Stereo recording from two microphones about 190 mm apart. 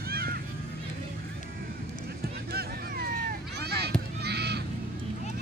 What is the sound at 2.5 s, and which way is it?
Run, 55° right (ahead or behind).